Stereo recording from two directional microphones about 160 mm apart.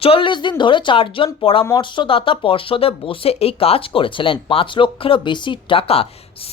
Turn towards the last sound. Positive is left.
turn(degrees=35)  # may be behind; listen again after turning